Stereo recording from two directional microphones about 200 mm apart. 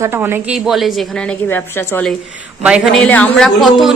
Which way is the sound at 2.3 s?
5° right (ahead or behind).